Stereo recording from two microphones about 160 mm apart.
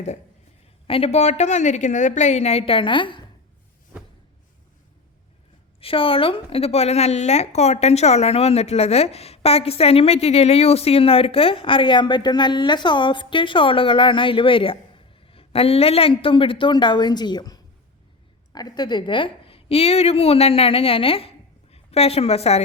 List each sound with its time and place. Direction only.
0.9 s a woman's voice: 35° left (ahead or behind)
5.8 s a woman's voice: 35° left (ahead or behind)